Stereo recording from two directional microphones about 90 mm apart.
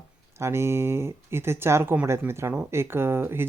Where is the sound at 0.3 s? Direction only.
30° right (ahead or behind).